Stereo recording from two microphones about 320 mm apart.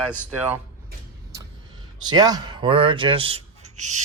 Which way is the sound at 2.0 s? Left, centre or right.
Centre.